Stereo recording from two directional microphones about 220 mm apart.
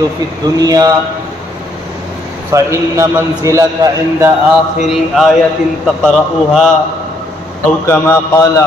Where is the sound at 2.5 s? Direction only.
15° right (ahead or behind).